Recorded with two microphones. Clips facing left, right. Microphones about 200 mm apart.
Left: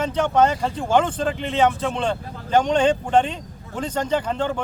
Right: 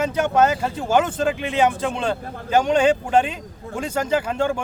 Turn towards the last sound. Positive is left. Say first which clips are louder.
# right 1 dB
turn(degrees=-10)  # may be behind; listen again after turning